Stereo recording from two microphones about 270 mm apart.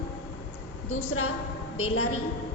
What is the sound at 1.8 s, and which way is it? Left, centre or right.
Speech, left.